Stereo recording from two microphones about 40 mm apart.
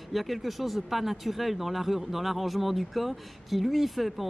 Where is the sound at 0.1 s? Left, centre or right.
Centre.